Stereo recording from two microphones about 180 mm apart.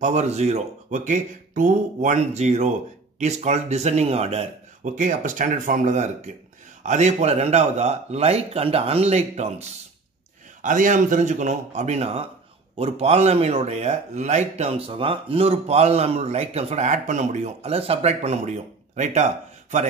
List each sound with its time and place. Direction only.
0.0 s speech: 40° right (ahead or behind)